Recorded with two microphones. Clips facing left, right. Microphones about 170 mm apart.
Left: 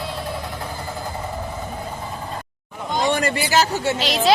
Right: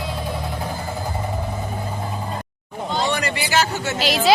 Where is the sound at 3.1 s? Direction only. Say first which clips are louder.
Left 2 dB; 45° left (ahead or behind).